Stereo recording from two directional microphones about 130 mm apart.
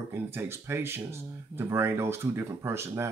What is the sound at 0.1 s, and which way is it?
Speech, 15° right (ahead or behind).